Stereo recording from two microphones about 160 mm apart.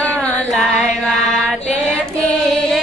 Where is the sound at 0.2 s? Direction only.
5° left (ahead or behind).